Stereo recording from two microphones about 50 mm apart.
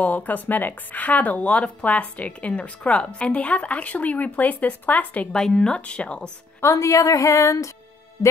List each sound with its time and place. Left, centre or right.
0.0 s speech: left
5.3 s speech: centre
6.6 s a woman's voice: left